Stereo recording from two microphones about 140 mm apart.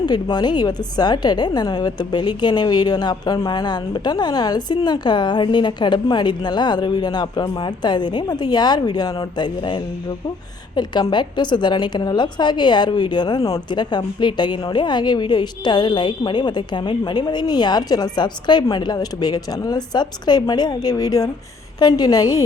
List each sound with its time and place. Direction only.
0.0 s a woman's voice: 30° left (ahead or behind)